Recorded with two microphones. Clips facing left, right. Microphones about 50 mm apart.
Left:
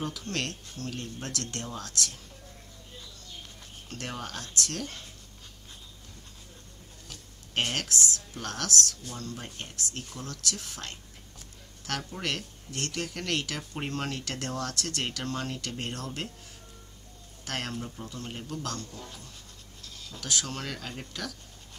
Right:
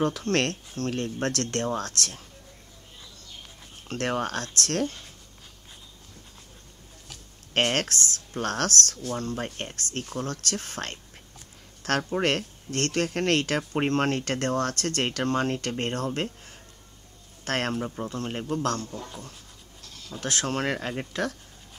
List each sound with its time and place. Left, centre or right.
0.0 s speech: right
3.9 s speech: right
7.5 s speech: right
17.5 s speech: right
20.1 s speech: right